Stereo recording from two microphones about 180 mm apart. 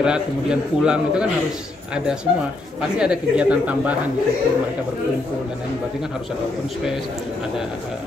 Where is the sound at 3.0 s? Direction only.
5° right (ahead or behind).